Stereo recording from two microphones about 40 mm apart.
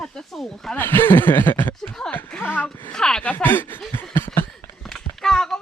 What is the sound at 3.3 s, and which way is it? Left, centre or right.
Speech, left.